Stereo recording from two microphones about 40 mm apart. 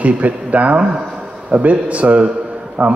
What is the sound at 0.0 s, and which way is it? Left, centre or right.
A man's voice, right.